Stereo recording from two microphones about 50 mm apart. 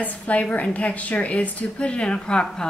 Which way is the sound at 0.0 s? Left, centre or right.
Left.